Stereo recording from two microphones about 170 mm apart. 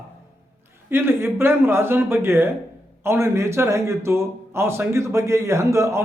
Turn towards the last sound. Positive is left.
turn(degrees=-15)  # may be behind; listen again after turning